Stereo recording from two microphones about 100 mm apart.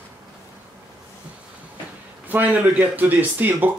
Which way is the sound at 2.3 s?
15° right (ahead or behind).